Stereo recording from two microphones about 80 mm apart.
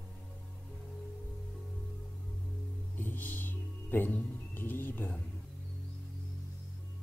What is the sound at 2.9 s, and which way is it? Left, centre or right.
Music, left.